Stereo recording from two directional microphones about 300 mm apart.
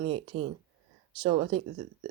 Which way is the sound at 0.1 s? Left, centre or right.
Centre.